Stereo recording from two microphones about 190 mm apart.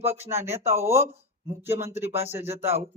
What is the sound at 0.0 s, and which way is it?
Speech, 10° right (ahead or behind).